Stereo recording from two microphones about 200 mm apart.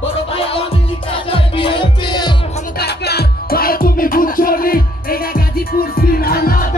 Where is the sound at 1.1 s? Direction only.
25° left (ahead or behind).